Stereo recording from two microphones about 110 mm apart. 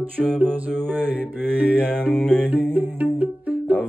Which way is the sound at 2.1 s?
10° left (ahead or behind).